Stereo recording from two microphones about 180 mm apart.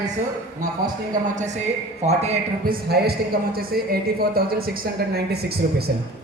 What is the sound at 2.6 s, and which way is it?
Speech, 60° right (ahead or behind).